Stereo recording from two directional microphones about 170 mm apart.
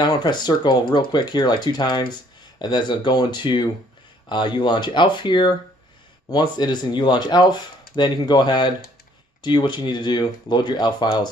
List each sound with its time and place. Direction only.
0.0 s speech: 25° left (ahead or behind)